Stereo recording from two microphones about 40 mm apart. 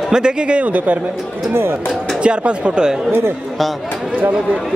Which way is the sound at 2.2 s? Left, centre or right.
Right.